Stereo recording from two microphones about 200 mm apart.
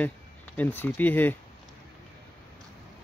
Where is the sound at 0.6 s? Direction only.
10° left (ahead or behind).